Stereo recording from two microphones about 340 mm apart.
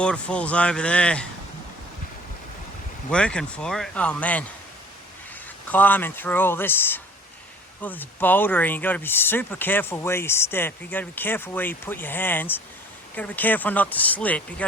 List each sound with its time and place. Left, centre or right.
0.0 s speech: centre
3.1 s speech: centre
5.6 s speech: centre